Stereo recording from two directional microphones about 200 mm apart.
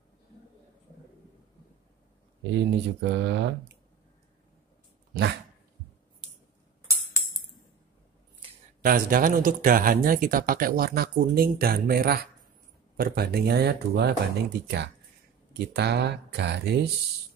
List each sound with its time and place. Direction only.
2.5 s speech: 60° right (ahead or behind)
8.8 s speech: 45° right (ahead or behind)